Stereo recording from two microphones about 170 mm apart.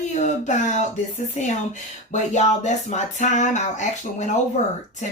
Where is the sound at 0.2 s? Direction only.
45° left (ahead or behind).